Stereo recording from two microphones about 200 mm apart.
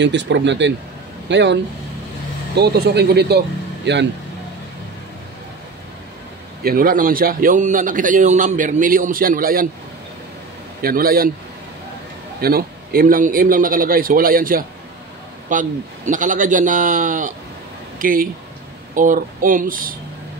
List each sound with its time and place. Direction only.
0.0 s speech: 60° right (ahead or behind)
6.6 s a man's voice: 45° right (ahead or behind)
10.8 s a man's voice: 50° right (ahead or behind)
12.4 s a man's voice: 50° right (ahead or behind)